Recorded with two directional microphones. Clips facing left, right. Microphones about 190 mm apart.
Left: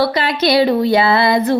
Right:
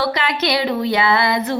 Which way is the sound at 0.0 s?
35° left (ahead or behind).